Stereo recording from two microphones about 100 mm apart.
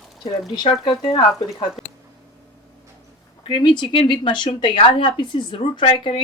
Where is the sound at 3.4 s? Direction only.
60° left (ahead or behind).